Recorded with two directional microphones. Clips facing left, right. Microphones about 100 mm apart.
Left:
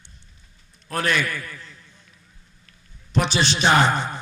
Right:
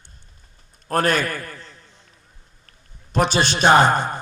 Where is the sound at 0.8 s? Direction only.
45° right (ahead or behind).